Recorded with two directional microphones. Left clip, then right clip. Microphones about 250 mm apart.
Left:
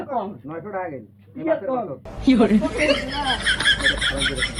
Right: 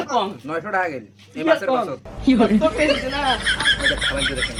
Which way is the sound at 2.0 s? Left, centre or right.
Centre.